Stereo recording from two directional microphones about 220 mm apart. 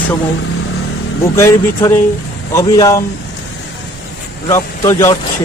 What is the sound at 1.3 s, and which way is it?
Speech, 10° left (ahead or behind).